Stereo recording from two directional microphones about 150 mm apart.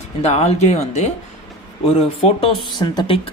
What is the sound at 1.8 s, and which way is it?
Speech, 40° left (ahead or behind).